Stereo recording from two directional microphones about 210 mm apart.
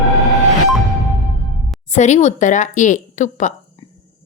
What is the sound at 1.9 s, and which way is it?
A woman's voice, 35° left (ahead or behind).